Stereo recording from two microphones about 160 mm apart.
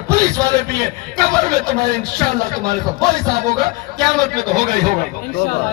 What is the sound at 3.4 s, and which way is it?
A man's voice, 45° right (ahead or behind).